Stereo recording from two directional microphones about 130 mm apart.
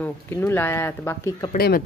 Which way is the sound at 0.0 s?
15° left (ahead or behind).